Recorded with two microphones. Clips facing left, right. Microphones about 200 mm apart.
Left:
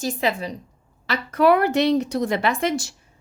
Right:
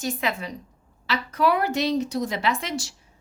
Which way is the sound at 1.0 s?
55° left (ahead or behind).